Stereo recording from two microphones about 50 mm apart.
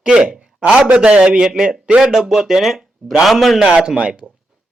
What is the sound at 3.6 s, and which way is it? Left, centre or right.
Speech, centre.